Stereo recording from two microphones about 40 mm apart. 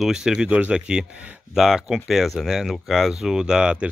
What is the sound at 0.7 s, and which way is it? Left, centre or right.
Speech, right.